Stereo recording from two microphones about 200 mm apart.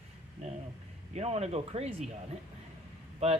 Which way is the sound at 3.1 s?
30° right (ahead or behind).